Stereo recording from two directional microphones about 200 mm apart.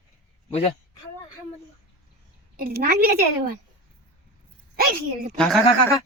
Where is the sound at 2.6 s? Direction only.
50° right (ahead or behind).